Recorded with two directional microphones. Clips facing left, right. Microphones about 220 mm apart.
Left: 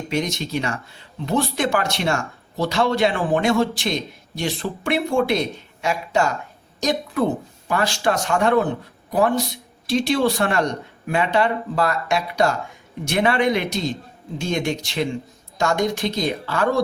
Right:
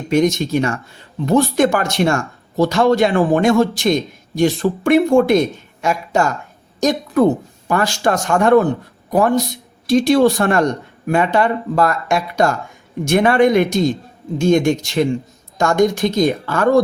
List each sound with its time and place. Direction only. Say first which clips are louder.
0.1 s speech: right 10 dB; 45° right (ahead or behind)